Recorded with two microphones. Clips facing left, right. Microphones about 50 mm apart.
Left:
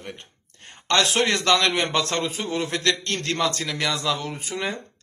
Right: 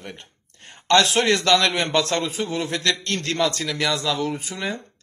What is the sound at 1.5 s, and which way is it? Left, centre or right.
Speech, left.